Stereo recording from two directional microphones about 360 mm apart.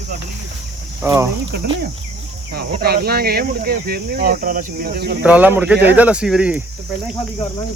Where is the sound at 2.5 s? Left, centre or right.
Right.